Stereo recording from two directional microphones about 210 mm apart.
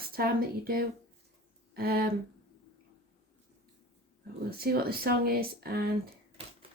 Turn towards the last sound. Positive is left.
turn(degrees=-45)  # may be behind; listen again after turning